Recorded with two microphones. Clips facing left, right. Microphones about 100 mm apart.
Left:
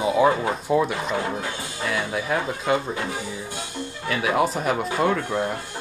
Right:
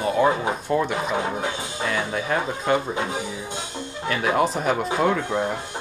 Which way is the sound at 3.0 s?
20° right (ahead or behind).